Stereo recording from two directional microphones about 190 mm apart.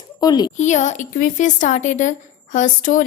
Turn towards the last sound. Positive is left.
turn(degrees=45)  # may be behind; listen again after turning